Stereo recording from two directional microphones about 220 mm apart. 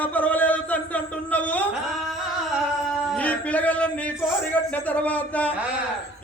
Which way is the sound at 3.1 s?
5° left (ahead or behind).